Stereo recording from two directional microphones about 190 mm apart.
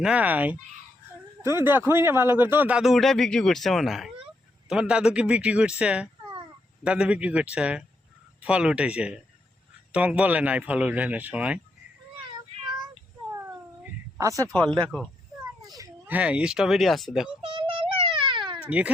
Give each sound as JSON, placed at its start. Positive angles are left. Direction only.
{"t": 0.0, "sound": "a man's voice", "side_deg": -5}
{"t": 13.8, "sound": "a sound", "side_deg": -15}
{"t": 14.5, "sound": "speech", "side_deg": 5}
{"t": 15.7, "sound": "speech", "side_deg": -15}
{"t": 17.4, "sound": "a sound", "side_deg": -30}
{"t": 18.6, "sound": "speech", "side_deg": -5}